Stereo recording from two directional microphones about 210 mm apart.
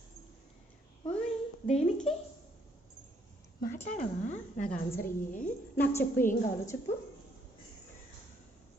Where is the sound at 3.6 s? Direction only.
35° left (ahead or behind).